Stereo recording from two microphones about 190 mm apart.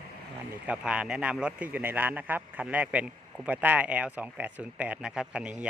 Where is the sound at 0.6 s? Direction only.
5° right (ahead or behind).